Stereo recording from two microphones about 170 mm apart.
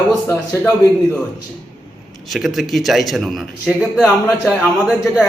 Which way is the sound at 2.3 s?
Centre (ahead or behind).